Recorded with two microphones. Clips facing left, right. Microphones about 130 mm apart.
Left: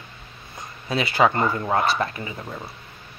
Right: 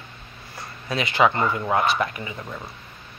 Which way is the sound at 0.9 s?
35° left (ahead or behind).